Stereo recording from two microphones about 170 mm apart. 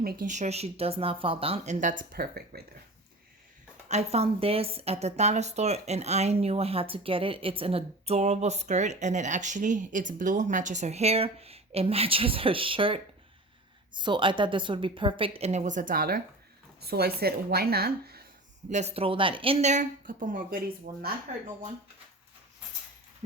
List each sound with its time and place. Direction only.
0.0 s speech: 60° right (ahead or behind)
3.8 s a woman's voice: 40° right (ahead or behind); by 16.2 s 55° right (ahead or behind)
16.8 s a woman's voice: 65° right (ahead or behind)
18.7 s a woman's voice: 40° right (ahead or behind); by 21.1 s 60° right (ahead or behind)